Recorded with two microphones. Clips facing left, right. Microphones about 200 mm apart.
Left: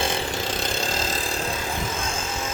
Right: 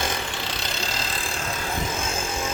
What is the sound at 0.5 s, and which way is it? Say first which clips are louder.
Vehicle: left 4 dB; 50° left (ahead or behind).